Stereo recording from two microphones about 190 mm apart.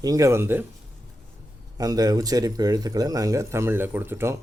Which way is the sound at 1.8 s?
20° right (ahead or behind).